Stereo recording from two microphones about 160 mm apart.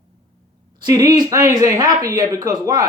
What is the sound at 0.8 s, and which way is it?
A man's voice, 25° right (ahead or behind).